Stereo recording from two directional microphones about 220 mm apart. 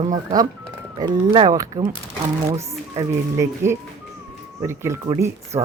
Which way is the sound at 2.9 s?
10° right (ahead or behind).